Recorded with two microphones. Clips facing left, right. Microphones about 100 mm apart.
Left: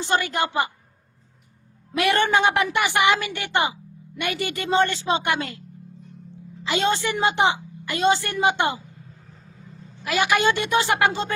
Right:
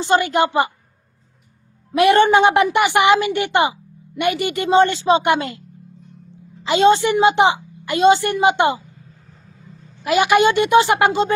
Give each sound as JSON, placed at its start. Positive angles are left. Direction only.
{"t": 0.0, "sound": "a woman's voice", "side_deg": -20}
{"t": 2.0, "sound": "a woman's voice", "side_deg": -20}
{"t": 6.7, "sound": "a woman's voice", "side_deg": -20}
{"t": 10.0, "sound": "a woman's voice", "side_deg": -20}